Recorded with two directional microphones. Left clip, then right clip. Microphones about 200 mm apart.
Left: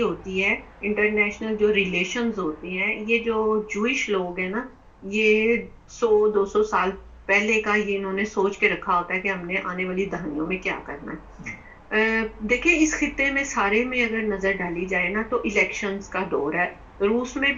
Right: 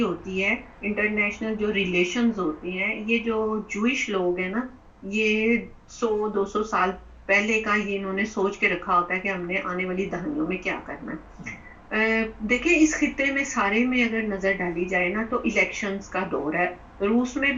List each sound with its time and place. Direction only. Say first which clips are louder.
0.3 s a woman's voice: left 2 dB; 20° left (ahead or behind)